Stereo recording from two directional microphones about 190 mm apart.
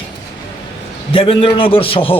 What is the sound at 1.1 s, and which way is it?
Speech, 30° left (ahead or behind).